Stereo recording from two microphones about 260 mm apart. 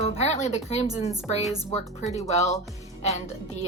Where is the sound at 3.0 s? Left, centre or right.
Left.